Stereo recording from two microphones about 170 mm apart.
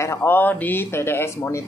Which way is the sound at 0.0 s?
15° left (ahead or behind).